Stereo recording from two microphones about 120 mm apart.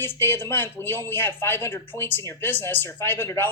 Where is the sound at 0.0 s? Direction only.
20° left (ahead or behind).